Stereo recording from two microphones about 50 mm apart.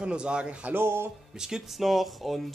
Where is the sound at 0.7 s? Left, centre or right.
Right.